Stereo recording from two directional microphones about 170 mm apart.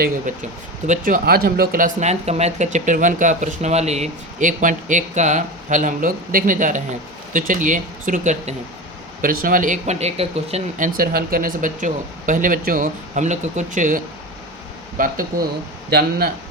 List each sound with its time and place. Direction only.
0.9 s speech: 55° right (ahead or behind)
9.2 s speech: 55° right (ahead or behind); by 10.6 s 35° right (ahead or behind)
10.8 s speech: 55° right (ahead or behind)
15.9 s a man's voice: 65° right (ahead or behind)